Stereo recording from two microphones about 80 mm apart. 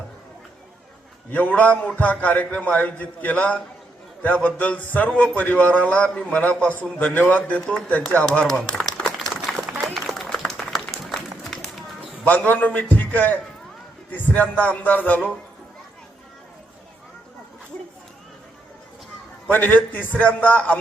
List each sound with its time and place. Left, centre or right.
1.3 s a man's voice: left
4.6 s a man's voice: left
8.5 s a sound: centre
9.8 s applause: centre
12.2 s a man's voice: left
19.5 s a man's voice: left